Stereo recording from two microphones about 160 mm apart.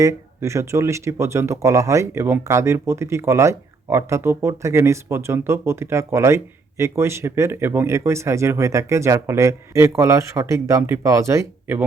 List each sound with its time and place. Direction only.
0.0 s speech: 20° right (ahead or behind)